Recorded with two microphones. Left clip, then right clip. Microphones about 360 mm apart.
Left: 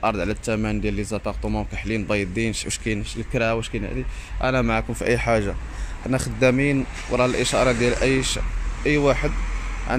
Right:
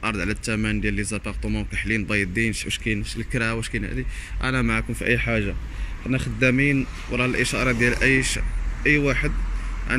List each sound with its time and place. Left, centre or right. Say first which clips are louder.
0.0 s speech: left 3 dB; centre